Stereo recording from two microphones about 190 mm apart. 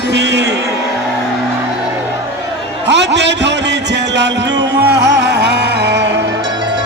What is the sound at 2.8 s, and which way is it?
A man's voice, 70° right (ahead or behind).